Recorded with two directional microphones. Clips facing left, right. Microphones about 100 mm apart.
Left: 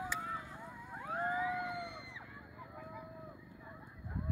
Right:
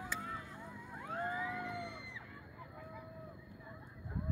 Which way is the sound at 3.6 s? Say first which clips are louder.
Even; 20° left (ahead or behind).